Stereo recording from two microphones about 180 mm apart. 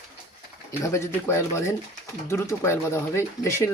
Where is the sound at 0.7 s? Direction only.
15° left (ahead or behind).